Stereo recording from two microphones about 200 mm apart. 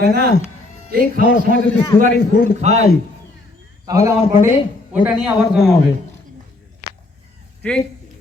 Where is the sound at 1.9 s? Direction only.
10° left (ahead or behind).